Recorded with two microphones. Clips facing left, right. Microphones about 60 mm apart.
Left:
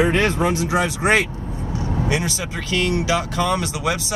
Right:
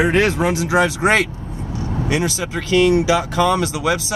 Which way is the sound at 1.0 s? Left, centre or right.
Centre.